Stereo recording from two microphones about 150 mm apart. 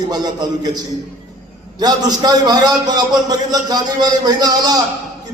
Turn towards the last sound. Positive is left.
turn(degrees=-25)  # may be behind; listen again after turning